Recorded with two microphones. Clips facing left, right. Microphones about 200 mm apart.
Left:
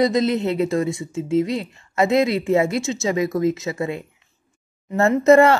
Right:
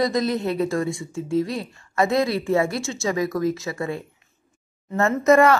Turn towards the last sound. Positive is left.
turn(degrees=25)  # may be behind; listen again after turning